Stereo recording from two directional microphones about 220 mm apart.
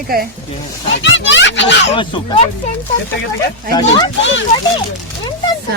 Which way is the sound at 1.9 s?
25° left (ahead or behind).